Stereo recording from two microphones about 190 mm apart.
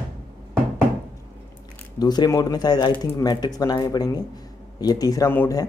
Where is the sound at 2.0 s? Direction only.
20° left (ahead or behind).